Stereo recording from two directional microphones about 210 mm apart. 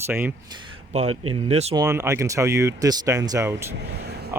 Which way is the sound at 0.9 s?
30° right (ahead or behind).